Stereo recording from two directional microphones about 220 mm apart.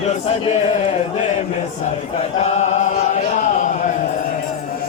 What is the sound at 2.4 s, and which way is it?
Chant, 30° left (ahead or behind).